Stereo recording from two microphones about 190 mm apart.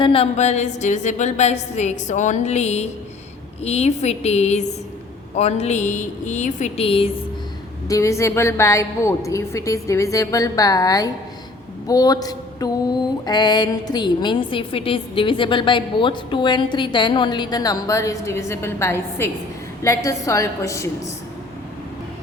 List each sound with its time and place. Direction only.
0.0 s speech: 30° left (ahead or behind)
7.9 s a woman's voice: 15° left (ahead or behind)